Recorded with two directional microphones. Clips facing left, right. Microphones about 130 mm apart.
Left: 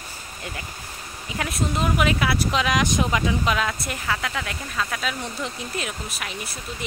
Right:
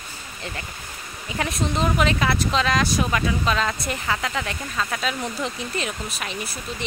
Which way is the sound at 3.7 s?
Centre (ahead or behind).